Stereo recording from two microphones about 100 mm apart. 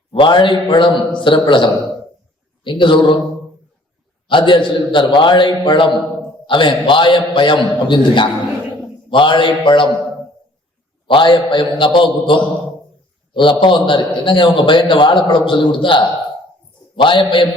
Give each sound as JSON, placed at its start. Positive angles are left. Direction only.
{"t": 0.1, "sound": "a man's voice", "side_deg": 55}
{"t": 4.3, "sound": "a man's voice", "side_deg": 55}
{"t": 11.0, "sound": "a man's voice", "side_deg": 55}